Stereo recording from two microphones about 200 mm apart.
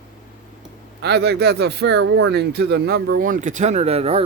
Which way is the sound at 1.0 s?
55° right (ahead or behind).